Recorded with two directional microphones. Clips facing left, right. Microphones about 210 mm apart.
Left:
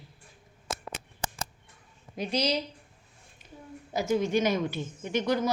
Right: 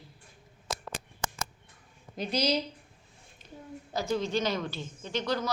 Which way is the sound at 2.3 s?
Centre (ahead or behind).